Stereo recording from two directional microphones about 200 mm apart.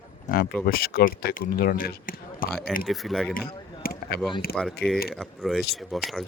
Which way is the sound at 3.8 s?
50° left (ahead or behind).